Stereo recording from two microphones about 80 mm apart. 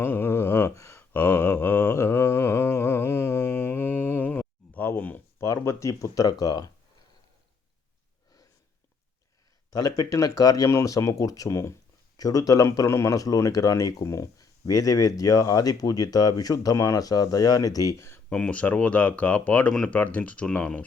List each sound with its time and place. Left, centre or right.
0.0 s a sound: left
5.6 s speech: left
6.4 s speech: left
9.6 s speech: left
18.3 s speech: centre